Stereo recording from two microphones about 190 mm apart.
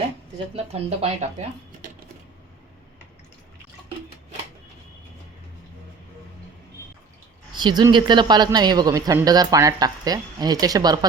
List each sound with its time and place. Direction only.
0.5 s speech: 30° right (ahead or behind)
7.5 s a man's voice: 25° right (ahead or behind)